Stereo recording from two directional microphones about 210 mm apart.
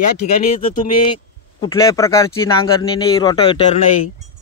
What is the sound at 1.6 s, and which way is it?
Speech, 15° left (ahead or behind).